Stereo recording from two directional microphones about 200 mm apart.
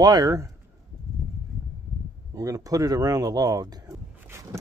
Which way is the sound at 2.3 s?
15° right (ahead or behind).